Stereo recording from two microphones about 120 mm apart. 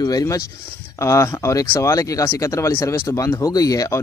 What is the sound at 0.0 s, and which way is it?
Speech, 30° left (ahead or behind).